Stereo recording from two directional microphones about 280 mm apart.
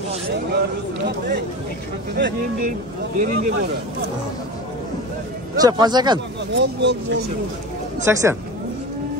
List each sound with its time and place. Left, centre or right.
1.0 s speech: right
5.6 s speech: centre
6.5 s speech: right
8.0 s speech: centre